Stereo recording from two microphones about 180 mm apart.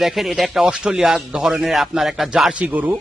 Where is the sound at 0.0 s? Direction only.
Centre (ahead or behind).